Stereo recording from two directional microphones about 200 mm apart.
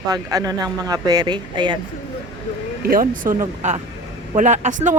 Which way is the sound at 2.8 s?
45° right (ahead or behind).